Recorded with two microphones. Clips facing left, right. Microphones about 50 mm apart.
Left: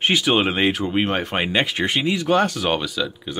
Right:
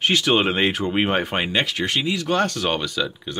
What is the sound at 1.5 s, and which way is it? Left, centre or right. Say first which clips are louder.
Speech: left 2 dB; centre.